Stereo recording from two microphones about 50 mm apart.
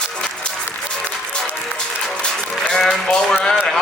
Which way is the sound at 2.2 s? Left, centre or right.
Centre.